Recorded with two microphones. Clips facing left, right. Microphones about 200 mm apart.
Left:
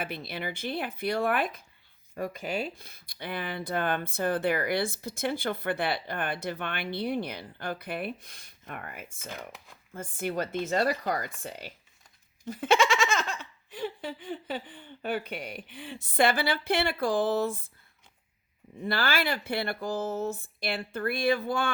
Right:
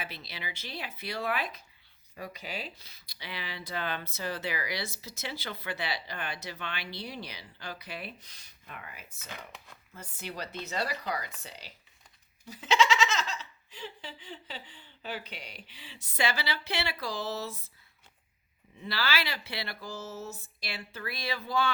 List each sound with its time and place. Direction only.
0.0 s speech: 55° left (ahead or behind)
18.8 s speech: 50° left (ahead or behind)